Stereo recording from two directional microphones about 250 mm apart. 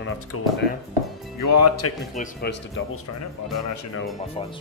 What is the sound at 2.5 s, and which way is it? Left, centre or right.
Speech, left.